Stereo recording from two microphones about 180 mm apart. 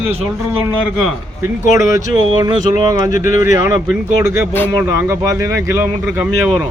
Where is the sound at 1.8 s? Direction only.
15° right (ahead or behind).